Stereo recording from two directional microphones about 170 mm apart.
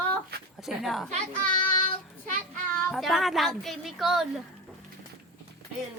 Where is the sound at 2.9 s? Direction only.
Centre (ahead or behind).